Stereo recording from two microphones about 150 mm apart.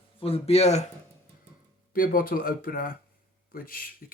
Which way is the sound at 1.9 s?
70° left (ahead or behind).